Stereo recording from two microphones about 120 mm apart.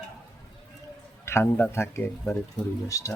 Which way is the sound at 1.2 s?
20° left (ahead or behind).